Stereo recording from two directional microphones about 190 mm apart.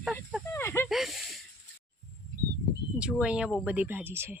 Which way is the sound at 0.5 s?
15° left (ahead or behind).